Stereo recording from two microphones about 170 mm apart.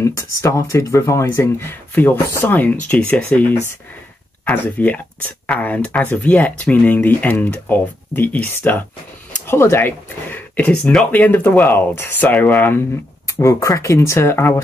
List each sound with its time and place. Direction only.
0.0 s speech: 20° left (ahead or behind)